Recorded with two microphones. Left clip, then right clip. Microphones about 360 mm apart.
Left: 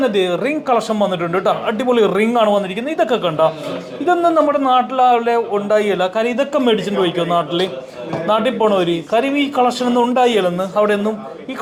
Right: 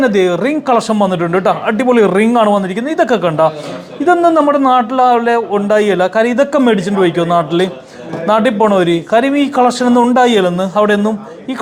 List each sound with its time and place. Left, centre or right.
0.0 s speech: right